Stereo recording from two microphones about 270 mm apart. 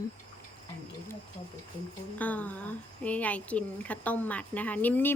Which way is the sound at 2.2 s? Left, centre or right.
Centre.